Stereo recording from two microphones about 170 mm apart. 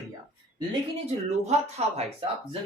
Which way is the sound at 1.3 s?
40° right (ahead or behind).